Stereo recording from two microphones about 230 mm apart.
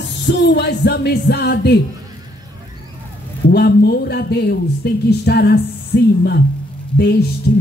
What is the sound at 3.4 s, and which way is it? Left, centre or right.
Speech, left.